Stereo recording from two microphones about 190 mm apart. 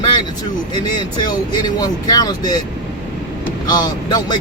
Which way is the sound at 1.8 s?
20° left (ahead or behind).